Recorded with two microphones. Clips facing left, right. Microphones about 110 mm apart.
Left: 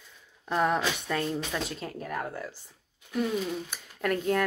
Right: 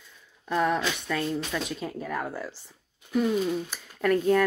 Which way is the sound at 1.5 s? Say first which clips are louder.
Right 2 dB; 15° left (ahead or behind).